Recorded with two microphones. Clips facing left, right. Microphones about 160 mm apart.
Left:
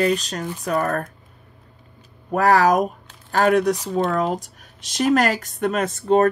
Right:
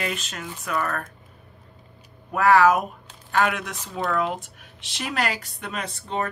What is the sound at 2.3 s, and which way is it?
Speech, 40° left (ahead or behind).